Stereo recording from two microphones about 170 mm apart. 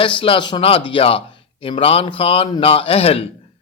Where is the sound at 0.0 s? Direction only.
30° left (ahead or behind).